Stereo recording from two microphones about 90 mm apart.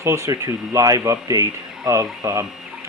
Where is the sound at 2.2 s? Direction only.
45° right (ahead or behind).